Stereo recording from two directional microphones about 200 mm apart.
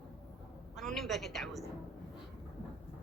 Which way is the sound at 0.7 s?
Centre (ahead or behind).